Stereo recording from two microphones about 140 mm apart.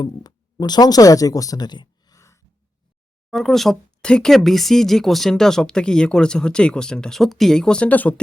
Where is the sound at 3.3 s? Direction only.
Centre (ahead or behind).